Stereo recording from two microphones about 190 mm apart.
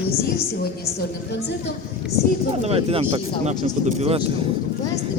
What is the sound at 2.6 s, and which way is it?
Speech, 30° right (ahead or behind).